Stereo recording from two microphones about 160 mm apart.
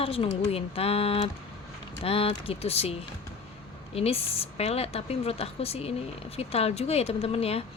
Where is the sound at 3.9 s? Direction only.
40° left (ahead or behind).